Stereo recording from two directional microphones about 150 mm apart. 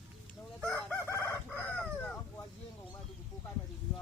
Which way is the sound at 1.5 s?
Centre (ahead or behind).